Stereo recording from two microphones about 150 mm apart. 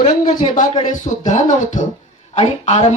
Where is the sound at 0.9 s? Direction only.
60° left (ahead or behind).